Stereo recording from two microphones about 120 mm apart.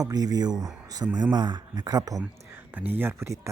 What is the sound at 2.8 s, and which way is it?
Speech, 15° right (ahead or behind).